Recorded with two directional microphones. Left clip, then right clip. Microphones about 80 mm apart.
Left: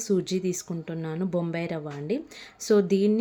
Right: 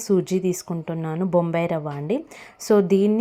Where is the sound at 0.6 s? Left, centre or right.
Right.